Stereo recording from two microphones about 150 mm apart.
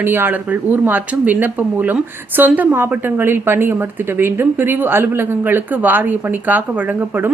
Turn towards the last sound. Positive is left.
turn(degrees=-10)  # may be behind; listen again after turning